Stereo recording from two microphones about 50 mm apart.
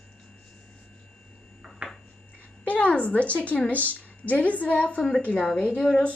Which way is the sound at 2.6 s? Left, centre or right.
Left.